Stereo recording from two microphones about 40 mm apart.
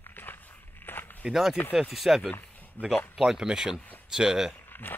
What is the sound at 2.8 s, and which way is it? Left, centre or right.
Speech, left.